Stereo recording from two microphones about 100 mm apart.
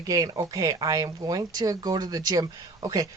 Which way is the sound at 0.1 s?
35° right (ahead or behind).